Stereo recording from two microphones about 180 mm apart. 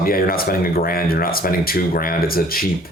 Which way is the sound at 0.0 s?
55° left (ahead or behind).